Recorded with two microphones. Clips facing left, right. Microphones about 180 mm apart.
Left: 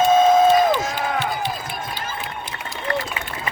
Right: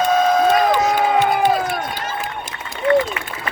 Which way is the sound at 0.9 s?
50° right (ahead or behind).